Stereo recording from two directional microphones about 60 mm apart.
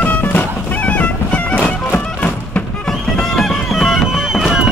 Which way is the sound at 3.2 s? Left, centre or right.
Centre.